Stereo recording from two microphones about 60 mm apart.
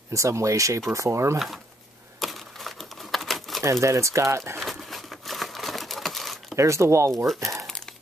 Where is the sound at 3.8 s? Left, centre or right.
Right.